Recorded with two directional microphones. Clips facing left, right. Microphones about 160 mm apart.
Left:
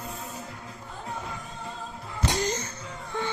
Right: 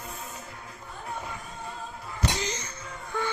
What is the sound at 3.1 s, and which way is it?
Music, 25° left (ahead or behind).